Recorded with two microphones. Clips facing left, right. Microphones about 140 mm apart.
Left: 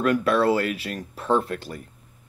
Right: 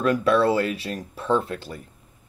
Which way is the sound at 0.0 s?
30° right (ahead or behind).